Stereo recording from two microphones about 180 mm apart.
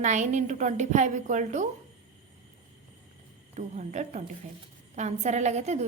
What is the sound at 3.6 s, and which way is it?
A woman's voice, 40° right (ahead or behind).